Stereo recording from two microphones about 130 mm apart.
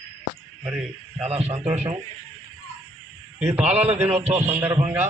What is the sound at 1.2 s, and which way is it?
Speech, 55° right (ahead or behind).